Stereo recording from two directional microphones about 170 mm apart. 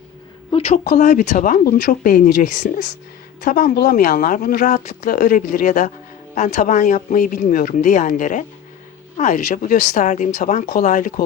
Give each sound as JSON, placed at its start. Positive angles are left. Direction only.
{"t": 0.5, "sound": "speech", "side_deg": 40}